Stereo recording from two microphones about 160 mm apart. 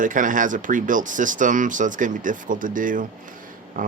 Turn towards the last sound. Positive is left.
turn(degrees=-60)  # may be behind; listen again after turning